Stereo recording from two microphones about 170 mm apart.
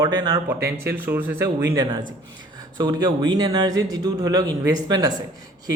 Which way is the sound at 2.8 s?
25° right (ahead or behind).